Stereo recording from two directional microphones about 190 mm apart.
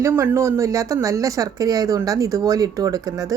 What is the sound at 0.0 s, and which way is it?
A woman's voice, 15° right (ahead or behind).